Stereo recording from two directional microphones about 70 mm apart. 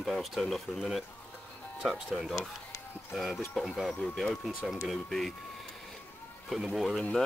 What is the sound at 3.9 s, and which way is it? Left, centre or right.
Speech, centre.